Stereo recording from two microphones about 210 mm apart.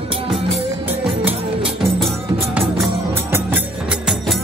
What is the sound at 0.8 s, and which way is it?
Music, 5° right (ahead or behind).